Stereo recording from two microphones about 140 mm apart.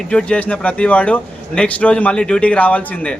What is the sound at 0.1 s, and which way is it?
A man's voice, 5° left (ahead or behind).